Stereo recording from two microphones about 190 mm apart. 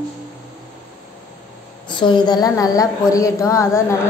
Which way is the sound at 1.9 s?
25° left (ahead or behind).